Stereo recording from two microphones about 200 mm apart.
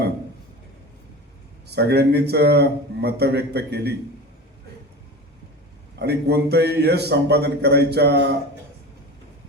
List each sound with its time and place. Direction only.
1.6 s a man's voice: 55° right (ahead or behind)
6.0 s a man's voice: 55° right (ahead or behind)